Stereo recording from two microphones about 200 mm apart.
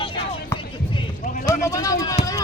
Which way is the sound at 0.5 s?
15° left (ahead or behind).